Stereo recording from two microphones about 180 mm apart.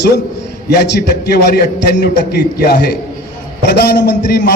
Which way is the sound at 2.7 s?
60° left (ahead or behind).